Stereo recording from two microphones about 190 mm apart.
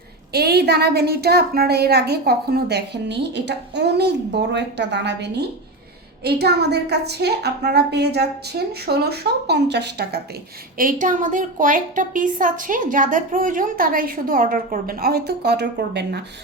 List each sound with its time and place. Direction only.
0.3 s a woman's voice: 60° right (ahead or behind)
10.8 s a woman's voice: 45° right (ahead or behind); by 16.2 s 60° right (ahead or behind)